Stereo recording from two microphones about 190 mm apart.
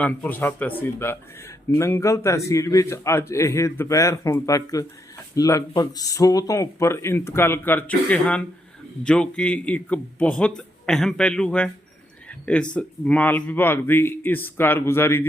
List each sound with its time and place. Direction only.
0.0 s a man's voice: 10° left (ahead or behind)
12.7 s a man's voice: 5° left (ahead or behind)